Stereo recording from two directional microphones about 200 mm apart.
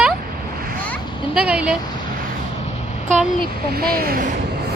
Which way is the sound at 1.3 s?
5° right (ahead or behind).